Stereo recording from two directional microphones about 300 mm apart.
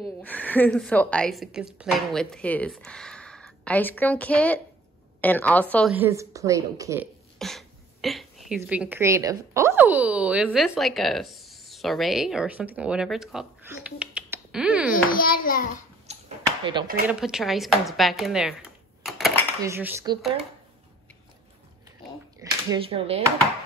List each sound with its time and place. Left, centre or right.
0.0 s a woman's voice: centre
5.9 s a woman's voice: centre
7.3 s speech: centre
15.0 s a child's voice: left
16.1 s arrow: right
16.8 s a woman's voice: centre
17.1 s speech: centre
22.4 s speech: centre